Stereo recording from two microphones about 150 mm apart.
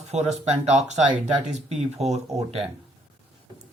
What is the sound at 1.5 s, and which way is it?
Speech, 45° right (ahead or behind).